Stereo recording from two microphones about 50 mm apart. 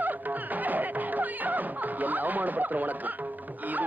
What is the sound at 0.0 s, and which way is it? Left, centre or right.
Music, right.